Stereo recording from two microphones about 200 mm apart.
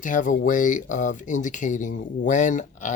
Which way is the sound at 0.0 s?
40° left (ahead or behind).